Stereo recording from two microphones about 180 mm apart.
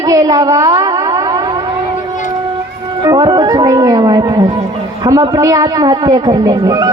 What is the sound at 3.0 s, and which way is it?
Speech, 20° right (ahead or behind).